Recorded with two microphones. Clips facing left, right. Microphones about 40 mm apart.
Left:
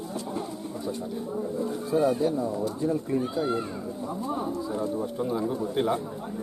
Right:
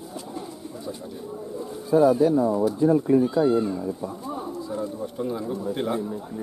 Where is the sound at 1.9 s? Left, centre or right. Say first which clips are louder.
Right 7 dB; right.